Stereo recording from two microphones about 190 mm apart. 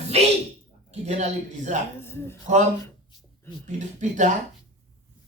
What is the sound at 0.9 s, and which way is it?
Speech, 35° right (ahead or behind).